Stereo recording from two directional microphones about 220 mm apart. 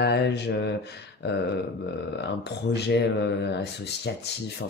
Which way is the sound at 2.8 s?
50° left (ahead or behind).